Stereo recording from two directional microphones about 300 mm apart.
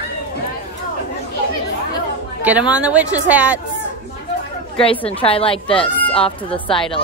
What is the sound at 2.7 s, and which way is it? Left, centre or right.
Speech, centre.